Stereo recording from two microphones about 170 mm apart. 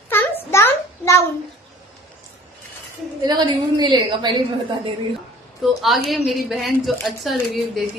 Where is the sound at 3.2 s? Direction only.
25° right (ahead or behind).